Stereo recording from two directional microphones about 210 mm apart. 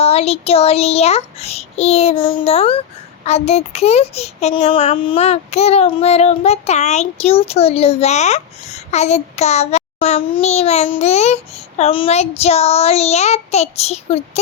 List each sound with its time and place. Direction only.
0.0 s a child's voice: 30° left (ahead or behind)